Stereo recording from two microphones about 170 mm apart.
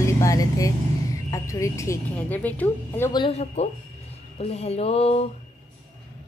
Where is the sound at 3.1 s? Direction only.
30° left (ahead or behind).